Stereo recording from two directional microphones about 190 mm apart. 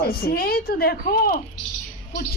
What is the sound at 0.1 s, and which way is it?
A woman's voice, 55° left (ahead or behind).